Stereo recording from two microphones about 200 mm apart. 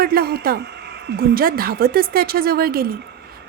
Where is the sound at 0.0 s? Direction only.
50° right (ahead or behind).